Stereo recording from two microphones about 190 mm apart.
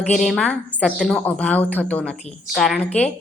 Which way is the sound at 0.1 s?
Centre (ahead or behind).